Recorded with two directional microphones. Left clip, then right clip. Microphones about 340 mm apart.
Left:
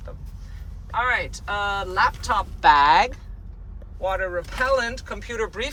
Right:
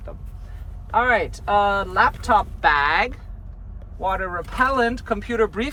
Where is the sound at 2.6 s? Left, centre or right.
Centre.